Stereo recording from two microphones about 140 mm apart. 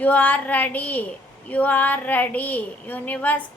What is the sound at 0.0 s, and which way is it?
A woman's voice, 10° left (ahead or behind).